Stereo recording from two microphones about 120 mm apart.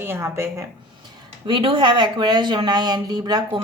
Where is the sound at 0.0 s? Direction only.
20° right (ahead or behind).